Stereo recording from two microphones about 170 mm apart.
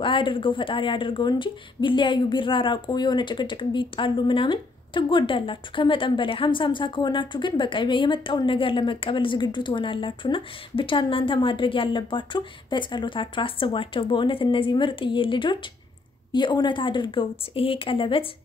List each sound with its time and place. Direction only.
0.0 s speech: 30° left (ahead or behind)